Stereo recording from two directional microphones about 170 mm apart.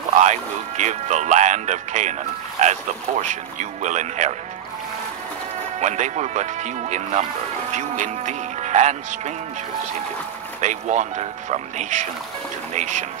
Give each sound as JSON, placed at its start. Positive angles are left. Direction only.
{"t": 0.1, "sound": "speech", "side_deg": -45}
{"t": 5.8, "sound": "speech", "side_deg": -45}
{"t": 10.6, "sound": "speech", "side_deg": -45}